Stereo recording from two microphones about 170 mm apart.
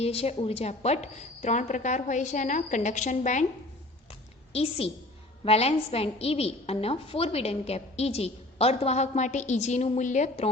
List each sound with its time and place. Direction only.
0.0 s a woman's voice: 35° left (ahead or behind)
4.5 s a woman's voice: 35° left (ahead or behind)